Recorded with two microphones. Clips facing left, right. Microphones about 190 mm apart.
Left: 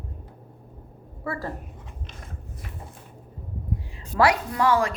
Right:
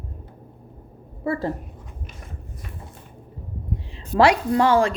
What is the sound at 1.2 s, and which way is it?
Speech, 25° right (ahead or behind).